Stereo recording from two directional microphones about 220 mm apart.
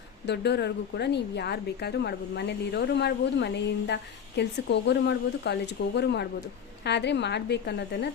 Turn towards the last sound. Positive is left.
turn(degrees=50)  # may be behind; listen again after turning